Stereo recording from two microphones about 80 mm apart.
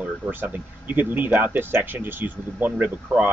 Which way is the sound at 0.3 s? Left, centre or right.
Right.